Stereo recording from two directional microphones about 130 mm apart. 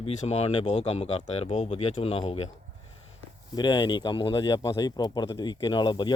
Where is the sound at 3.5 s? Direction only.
35° left (ahead or behind).